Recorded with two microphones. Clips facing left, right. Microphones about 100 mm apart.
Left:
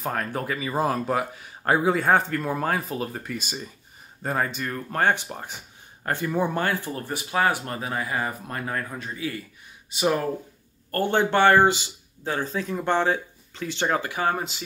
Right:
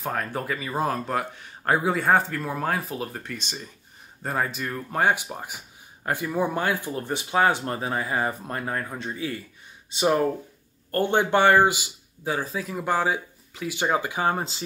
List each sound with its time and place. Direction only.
0.0 s speech: centre (ahead or behind); by 10.1 s 25° right (ahead or behind)
10.9 s speech: 15° right (ahead or behind)